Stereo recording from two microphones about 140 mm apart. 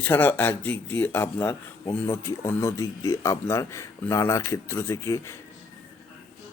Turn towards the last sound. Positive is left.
turn(degrees=20)  # may be behind; listen again after turning